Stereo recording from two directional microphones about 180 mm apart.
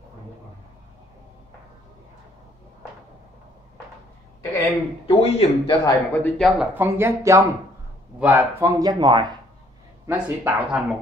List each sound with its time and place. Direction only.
5.0 s speech: 30° left (ahead or behind)
5.9 s speech: 10° left (ahead or behind)
6.7 s speech: 10° right (ahead or behind)
10.0 s speech: 10° right (ahead or behind)